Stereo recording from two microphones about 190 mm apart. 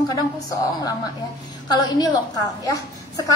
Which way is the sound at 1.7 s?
20° left (ahead or behind).